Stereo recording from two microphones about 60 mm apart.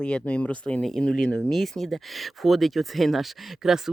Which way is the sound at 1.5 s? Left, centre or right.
Centre.